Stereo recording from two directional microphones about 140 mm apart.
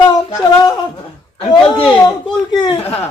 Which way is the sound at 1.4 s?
35° left (ahead or behind).